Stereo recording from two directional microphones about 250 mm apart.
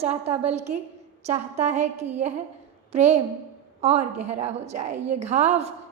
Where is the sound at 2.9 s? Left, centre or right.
Right.